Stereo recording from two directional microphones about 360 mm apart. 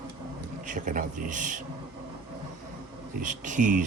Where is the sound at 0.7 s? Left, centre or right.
Right.